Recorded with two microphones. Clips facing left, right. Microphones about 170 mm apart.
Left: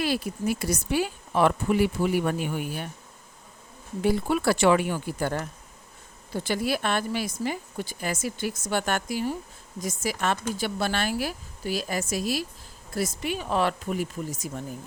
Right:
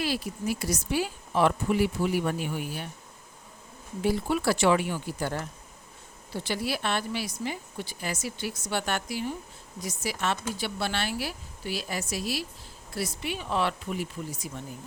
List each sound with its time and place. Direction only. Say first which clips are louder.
0.0 s speech: left 3 dB; 55° left (ahead or behind)
4.0 s a woman's voice: left 2 dB; 55° left (ahead or behind)